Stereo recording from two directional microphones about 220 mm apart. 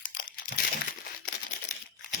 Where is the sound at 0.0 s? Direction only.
40° left (ahead or behind).